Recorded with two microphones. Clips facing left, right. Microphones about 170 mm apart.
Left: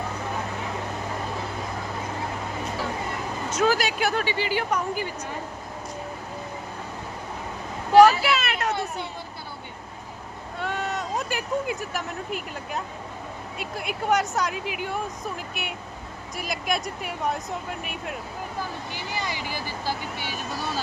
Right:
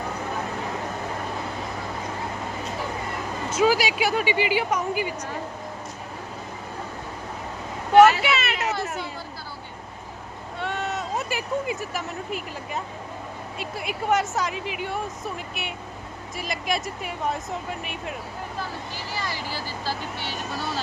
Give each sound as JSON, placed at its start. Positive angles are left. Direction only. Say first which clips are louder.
{"t": 3.5, "sound": "speech", "louder": "right 2 dB", "side_deg": -10}
{"t": 8.2, "sound": "a sound", "louder": "even", "side_deg": 0}
{"t": 10.6, "sound": "speech", "louder": "even", "side_deg": 0}
{"t": 19.1, "sound": "speech", "louder": "even", "side_deg": 20}